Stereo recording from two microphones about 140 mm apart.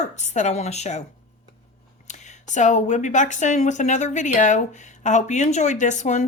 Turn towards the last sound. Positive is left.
turn(degrees=60)  # may be behind; listen again after turning